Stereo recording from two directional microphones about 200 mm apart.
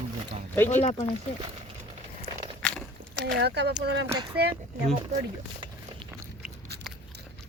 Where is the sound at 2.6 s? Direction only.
5° left (ahead or behind).